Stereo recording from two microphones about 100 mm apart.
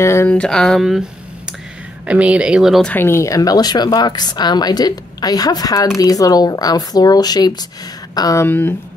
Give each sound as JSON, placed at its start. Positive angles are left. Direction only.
{"t": 0.0, "sound": "speech", "side_deg": 30}
{"t": 0.3, "sound": "speech", "side_deg": 10}
{"t": 2.0, "sound": "speech", "side_deg": -10}
{"t": 2.8, "sound": "speech", "side_deg": 20}
{"t": 8.4, "sound": "speech", "side_deg": 20}